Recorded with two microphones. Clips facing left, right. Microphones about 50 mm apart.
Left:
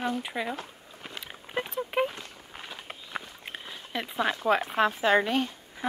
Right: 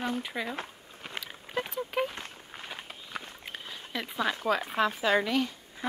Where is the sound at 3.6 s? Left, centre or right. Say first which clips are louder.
Left 2 dB; centre.